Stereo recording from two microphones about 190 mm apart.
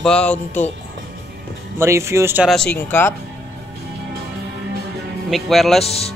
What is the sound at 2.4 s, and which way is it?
Speech, 5° left (ahead or behind).